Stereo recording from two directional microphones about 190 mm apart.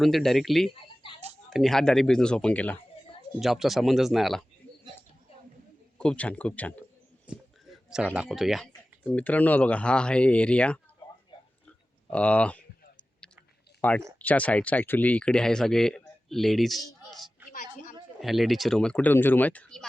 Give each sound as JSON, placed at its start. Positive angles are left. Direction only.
{"t": 0.0, "sound": "speech", "side_deg": 0}
{"t": 1.0, "sound": "a sound", "side_deg": 25}
{"t": 1.5, "sound": "speech", "side_deg": 0}
{"t": 6.0, "sound": "speech", "side_deg": 5}
{"t": 7.3, "sound": "speech", "side_deg": -5}
{"t": 12.1, "sound": "speech", "side_deg": 5}
{"t": 13.8, "sound": "speech", "side_deg": 10}